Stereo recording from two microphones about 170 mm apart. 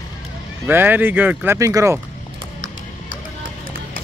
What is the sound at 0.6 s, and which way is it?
Speech, 10° right (ahead or behind).